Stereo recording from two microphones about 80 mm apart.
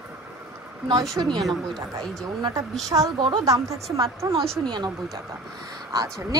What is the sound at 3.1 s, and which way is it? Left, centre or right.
Speech, right.